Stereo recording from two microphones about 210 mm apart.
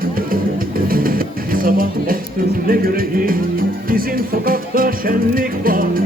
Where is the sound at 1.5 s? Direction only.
45° right (ahead or behind).